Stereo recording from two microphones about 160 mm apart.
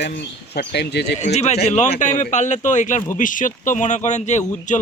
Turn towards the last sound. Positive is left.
turn(degrees=45)  # may be behind; listen again after turning